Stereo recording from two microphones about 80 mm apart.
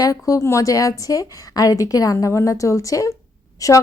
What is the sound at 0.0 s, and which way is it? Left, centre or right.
A woman's voice, left.